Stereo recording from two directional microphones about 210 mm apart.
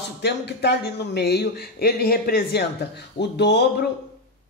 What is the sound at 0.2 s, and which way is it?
Speech, 50° left (ahead or behind).